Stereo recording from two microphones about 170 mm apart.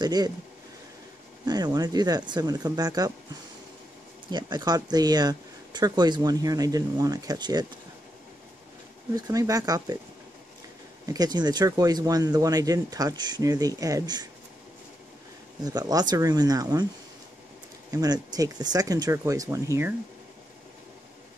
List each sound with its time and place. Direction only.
0.0 s speech: 25° right (ahead or behind)
1.4 s speech: 25° right (ahead or behind)
4.3 s speech: 25° right (ahead or behind)
9.1 s speech: 20° right (ahead or behind)
11.1 s speech: 25° right (ahead or behind)
15.6 s speech: 20° right (ahead or behind)
17.9 s speech: 25° right (ahead or behind)